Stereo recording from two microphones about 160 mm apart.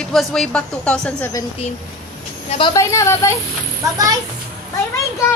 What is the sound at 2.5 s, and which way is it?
Speech, 30° left (ahead or behind).